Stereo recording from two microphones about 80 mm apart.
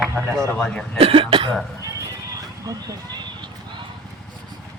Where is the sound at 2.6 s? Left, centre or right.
Right.